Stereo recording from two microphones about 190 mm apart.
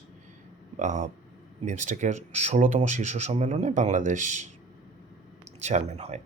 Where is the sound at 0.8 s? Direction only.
40° right (ahead or behind).